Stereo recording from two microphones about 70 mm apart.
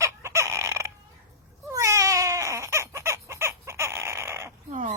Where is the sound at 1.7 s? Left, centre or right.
Right.